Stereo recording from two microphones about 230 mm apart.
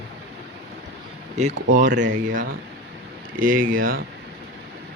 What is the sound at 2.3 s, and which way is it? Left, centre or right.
Speech, right.